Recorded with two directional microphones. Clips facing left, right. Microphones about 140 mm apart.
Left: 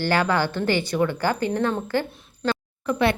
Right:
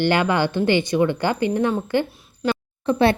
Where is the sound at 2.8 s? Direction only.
30° right (ahead or behind).